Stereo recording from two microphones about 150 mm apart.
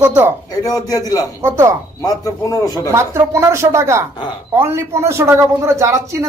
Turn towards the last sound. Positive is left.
turn(degrees=-20)  # may be behind; listen again after turning